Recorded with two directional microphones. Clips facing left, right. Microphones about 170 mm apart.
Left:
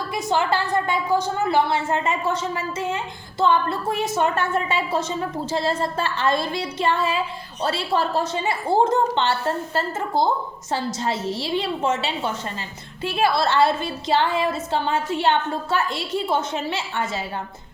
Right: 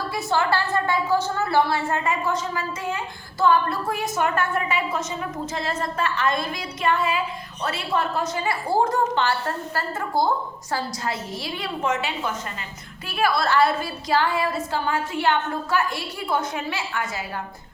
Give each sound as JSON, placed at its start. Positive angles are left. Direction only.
{"t": 0.1, "sound": "a woman's voice", "side_deg": 20}
{"t": 10.7, "sound": "a woman's voice", "side_deg": 25}